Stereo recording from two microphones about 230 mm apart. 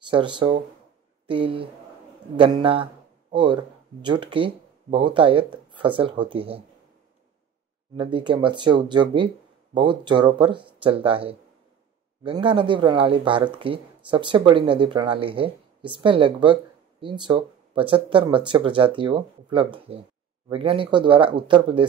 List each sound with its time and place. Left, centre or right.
0.1 s speech: right
7.9 s speech: right